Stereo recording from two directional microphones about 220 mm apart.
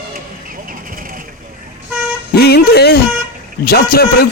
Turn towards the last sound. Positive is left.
turn(degrees=45)  # may be behind; listen again after turning